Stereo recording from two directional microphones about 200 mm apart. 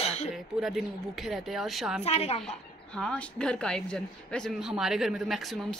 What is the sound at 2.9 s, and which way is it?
Speech, 5° left (ahead or behind).